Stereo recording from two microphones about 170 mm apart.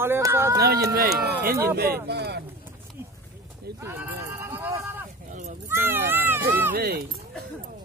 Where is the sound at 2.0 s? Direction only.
75° right (ahead or behind).